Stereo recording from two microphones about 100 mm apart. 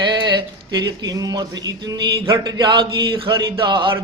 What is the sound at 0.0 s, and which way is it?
Speech, 50° right (ahead or behind).